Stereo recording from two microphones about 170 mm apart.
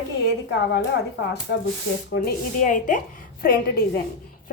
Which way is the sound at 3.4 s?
65° left (ahead or behind).